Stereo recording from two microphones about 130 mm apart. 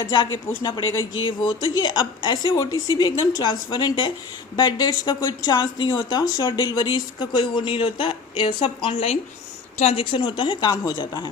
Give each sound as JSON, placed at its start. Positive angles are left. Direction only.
{"t": 1.2, "sound": "speech", "side_deg": 35}